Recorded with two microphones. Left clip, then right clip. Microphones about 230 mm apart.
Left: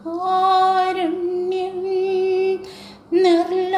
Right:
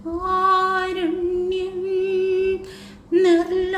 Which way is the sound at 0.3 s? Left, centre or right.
Centre.